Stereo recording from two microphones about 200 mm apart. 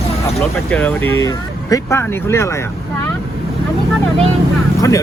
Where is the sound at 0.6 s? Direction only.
5° left (ahead or behind).